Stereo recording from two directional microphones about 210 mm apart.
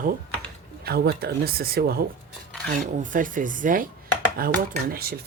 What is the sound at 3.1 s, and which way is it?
Speech, 40° right (ahead or behind).